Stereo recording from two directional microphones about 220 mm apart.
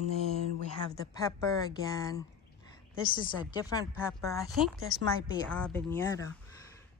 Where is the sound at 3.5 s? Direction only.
15° left (ahead or behind).